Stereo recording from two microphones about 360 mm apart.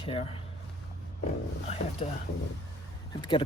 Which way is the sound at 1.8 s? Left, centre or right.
Left.